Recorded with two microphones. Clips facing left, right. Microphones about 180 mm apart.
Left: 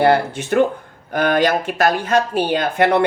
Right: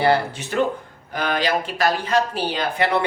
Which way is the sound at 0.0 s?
55° left (ahead or behind).